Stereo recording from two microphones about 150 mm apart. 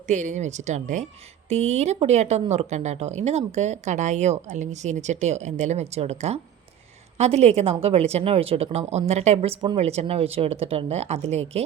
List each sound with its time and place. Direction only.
0.1 s speech: 50° right (ahead or behind)